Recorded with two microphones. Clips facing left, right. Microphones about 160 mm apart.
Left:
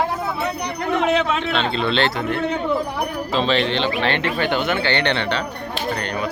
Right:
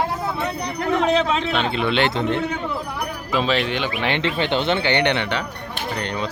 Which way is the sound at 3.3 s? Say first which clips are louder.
Left 1 dB; 5° right (ahead or behind).